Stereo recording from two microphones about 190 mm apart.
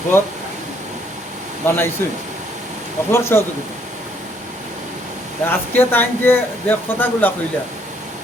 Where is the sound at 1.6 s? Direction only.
15° left (ahead or behind).